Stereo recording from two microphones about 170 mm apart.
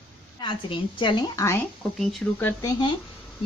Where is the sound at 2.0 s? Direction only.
5° left (ahead or behind).